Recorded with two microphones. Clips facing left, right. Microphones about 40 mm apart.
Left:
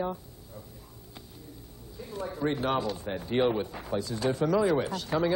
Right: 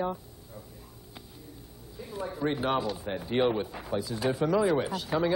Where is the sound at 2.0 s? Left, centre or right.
Centre.